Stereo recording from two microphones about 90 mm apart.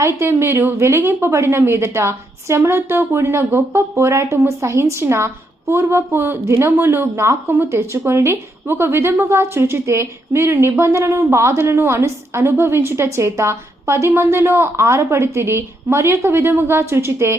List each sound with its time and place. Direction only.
0.0 s speech: 30° right (ahead or behind)